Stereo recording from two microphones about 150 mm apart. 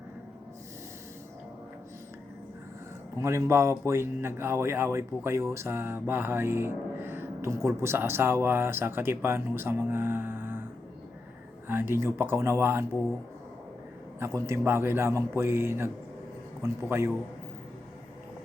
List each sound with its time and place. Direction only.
3.2 s speech: 20° right (ahead or behind)
11.7 s speech: 15° right (ahead or behind)
14.2 s speech: 20° right (ahead or behind)